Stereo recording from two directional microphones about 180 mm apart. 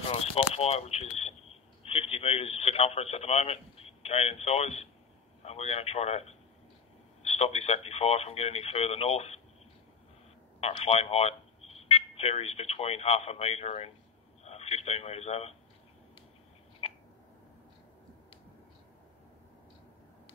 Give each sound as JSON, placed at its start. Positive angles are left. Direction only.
{"t": 0.0, "sound": "speech", "side_deg": 35}
{"t": 10.6, "sound": "speech", "side_deg": 35}
{"t": 16.8, "sound": "a sound", "side_deg": 35}